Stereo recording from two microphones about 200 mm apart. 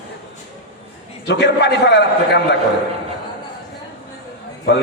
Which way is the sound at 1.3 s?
55° left (ahead or behind).